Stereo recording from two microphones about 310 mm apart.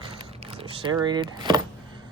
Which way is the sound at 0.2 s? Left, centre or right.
Centre.